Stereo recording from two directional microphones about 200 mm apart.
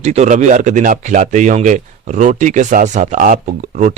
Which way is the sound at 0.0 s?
35° right (ahead or behind).